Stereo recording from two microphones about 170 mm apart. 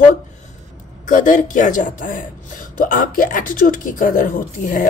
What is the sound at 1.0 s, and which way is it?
A man's voice, 50° left (ahead or behind).